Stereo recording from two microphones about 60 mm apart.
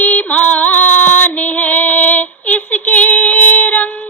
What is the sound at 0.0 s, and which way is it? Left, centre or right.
Female singing, left.